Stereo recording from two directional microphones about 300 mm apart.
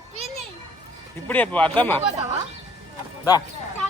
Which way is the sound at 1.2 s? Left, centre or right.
Centre.